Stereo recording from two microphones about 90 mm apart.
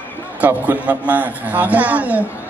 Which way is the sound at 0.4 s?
20° right (ahead or behind).